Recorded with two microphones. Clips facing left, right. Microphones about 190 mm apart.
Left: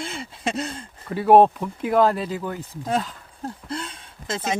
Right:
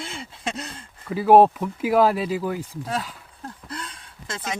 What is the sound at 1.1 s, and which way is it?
Speech, centre (ahead or behind).